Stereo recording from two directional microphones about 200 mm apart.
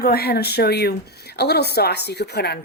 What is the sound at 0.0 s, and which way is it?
A woman's voice, 50° left (ahead or behind).